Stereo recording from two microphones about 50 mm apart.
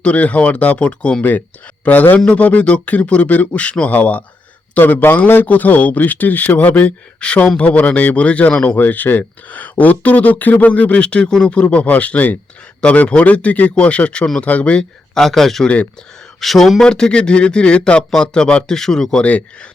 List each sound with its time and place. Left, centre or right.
0.0 s speech: left
1.8 s speech: left
4.8 s a man's voice: left
7.2 s speech: left
8.8 s speech: left
15.1 s a man's voice: centre
15.6 s speech: left
16.4 s a man's voice: centre